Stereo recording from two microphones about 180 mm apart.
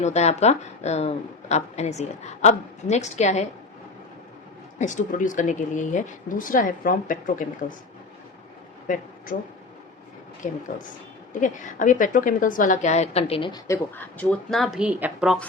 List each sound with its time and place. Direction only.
0.0 s a woman's voice: 40° left (ahead or behind)
4.8 s speech: 45° left (ahead or behind)
8.9 s speech: 45° left (ahead or behind); by 13.6 s 30° left (ahead or behind)
13.7 s speech: 10° left (ahead or behind); by 15.4 s 5° right (ahead or behind)